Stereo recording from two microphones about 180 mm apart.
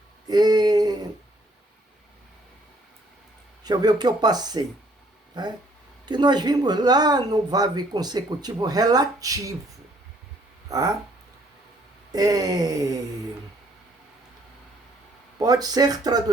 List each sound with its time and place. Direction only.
0.3 s a sound: 20° right (ahead or behind)
3.6 s speech: 20° right (ahead or behind)
10.7 s speech: 20° right (ahead or behind)
12.1 s speech: 20° right (ahead or behind)
15.4 s speech: 20° right (ahead or behind)